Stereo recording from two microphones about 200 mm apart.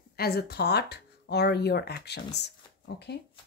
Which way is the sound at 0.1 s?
50° left (ahead or behind).